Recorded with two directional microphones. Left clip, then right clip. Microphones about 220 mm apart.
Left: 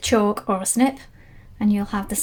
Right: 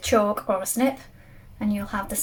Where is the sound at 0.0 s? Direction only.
50° left (ahead or behind).